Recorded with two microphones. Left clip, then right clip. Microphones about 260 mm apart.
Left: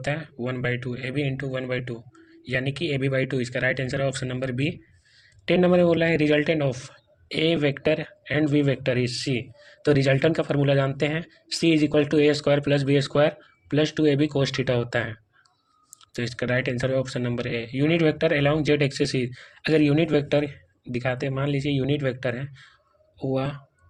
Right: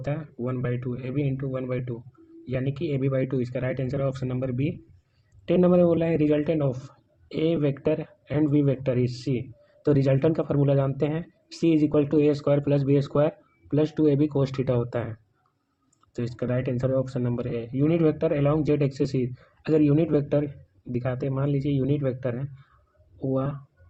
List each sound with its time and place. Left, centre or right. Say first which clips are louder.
0.0 s a man's voice: left 3 dB; left